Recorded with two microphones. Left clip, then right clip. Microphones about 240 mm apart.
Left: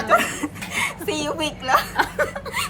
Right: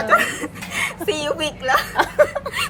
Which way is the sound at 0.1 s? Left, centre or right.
Centre.